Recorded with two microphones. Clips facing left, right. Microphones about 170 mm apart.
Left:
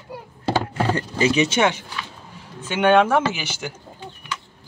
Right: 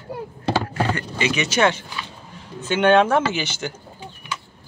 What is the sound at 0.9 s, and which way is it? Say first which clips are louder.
Speech: left 4 dB; 35° left (ahead or behind).